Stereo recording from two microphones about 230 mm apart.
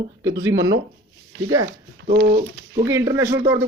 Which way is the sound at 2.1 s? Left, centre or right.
Right.